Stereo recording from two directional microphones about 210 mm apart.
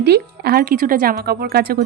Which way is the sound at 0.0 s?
50° right (ahead or behind).